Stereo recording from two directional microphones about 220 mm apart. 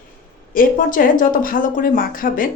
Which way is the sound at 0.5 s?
40° left (ahead or behind).